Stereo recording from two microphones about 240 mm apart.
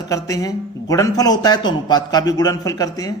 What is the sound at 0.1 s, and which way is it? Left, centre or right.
A man's voice, centre.